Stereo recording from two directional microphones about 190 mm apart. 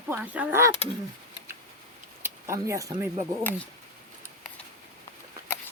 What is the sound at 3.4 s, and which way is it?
Speech, 10° left (ahead or behind).